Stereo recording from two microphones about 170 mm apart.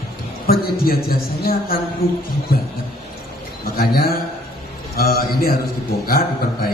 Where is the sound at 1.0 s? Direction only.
60° left (ahead or behind).